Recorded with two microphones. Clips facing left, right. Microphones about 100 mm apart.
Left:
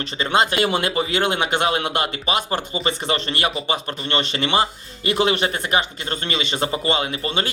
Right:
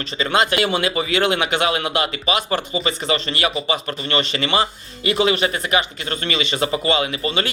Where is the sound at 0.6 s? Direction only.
50° left (ahead or behind).